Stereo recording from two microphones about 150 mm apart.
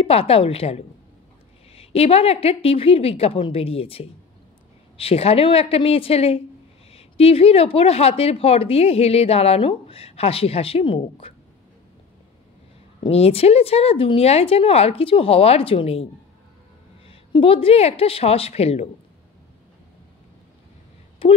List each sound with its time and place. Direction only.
0.0 s speech: 40° left (ahead or behind)
13.0 s speech: 40° left (ahead or behind)
17.1 s speech: 35° left (ahead or behind)
21.2 s speech: 40° left (ahead or behind)